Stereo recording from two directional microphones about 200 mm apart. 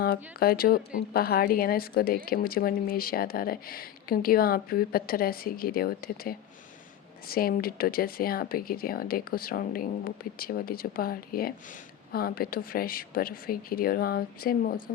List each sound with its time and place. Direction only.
0.0 s a woman's voice: 50° left (ahead or behind)